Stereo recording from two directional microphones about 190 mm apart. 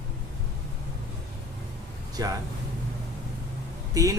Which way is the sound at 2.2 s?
20° right (ahead or behind).